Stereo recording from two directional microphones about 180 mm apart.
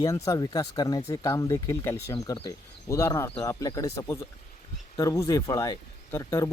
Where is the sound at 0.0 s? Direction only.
20° left (ahead or behind).